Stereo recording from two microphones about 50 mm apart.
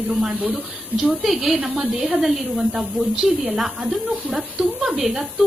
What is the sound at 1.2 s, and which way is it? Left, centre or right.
A woman's voice, centre.